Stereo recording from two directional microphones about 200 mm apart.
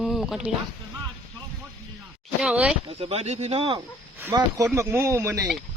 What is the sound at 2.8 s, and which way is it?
Speech, 30° right (ahead or behind).